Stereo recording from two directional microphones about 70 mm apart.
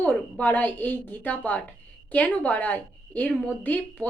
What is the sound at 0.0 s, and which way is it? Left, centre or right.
Speech, left.